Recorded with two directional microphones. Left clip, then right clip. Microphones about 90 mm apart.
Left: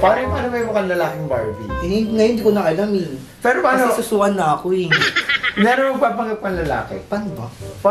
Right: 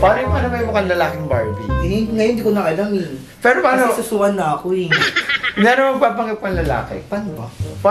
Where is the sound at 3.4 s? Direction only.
10° right (ahead or behind).